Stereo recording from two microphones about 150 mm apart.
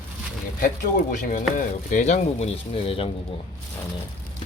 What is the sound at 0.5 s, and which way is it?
Speech, 65° left (ahead or behind).